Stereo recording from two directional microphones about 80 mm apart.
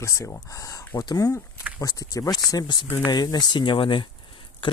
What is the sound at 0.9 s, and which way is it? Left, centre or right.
Speech, left.